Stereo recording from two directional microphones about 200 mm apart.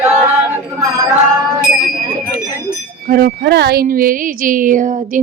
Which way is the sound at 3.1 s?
50° right (ahead or behind).